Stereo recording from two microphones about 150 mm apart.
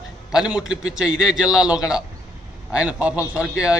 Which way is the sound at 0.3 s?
5° right (ahead or behind).